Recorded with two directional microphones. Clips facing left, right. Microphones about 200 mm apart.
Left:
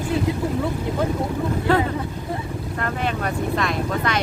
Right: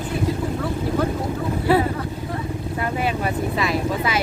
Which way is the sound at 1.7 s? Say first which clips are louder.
Right 3 dB; 10° right (ahead or behind).